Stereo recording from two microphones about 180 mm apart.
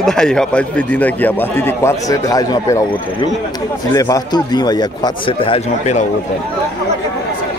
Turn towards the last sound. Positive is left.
turn(degrees=40)  # may be behind; listen again after turning